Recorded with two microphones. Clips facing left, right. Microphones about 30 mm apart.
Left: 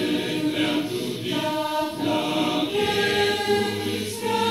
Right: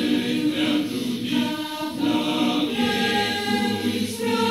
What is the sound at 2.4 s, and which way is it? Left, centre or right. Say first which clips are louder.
Choir: right 1 dB; centre.